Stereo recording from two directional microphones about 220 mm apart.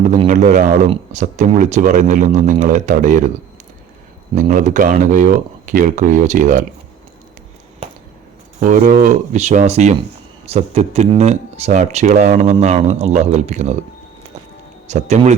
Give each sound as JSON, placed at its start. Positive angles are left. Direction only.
{"t": 0.0, "sound": "speech", "side_deg": -35}
{"t": 4.4, "sound": "speech", "side_deg": -35}
{"t": 8.6, "sound": "speech", "side_deg": -35}
{"t": 14.8, "sound": "speech", "side_deg": -30}